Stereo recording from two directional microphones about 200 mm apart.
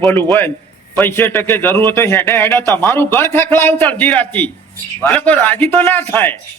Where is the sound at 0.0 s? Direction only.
5° left (ahead or behind).